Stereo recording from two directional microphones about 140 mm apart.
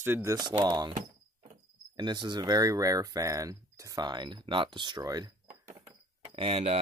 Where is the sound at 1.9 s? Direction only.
30° right (ahead or behind).